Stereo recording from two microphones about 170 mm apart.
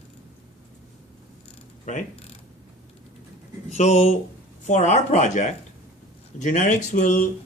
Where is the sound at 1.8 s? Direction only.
45° left (ahead or behind).